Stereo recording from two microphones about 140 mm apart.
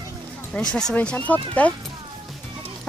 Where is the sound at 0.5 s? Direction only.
5° left (ahead or behind).